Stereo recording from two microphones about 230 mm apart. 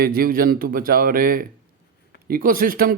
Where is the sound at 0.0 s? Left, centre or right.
Right.